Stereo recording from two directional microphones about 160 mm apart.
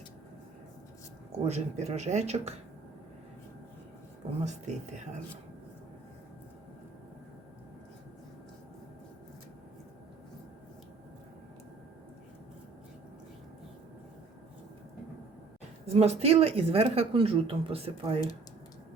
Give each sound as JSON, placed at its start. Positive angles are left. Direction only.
{"t": 1.5, "sound": "speech", "side_deg": -45}
{"t": 4.4, "sound": "speech", "side_deg": -50}
{"t": 15.9, "sound": "speech", "side_deg": -40}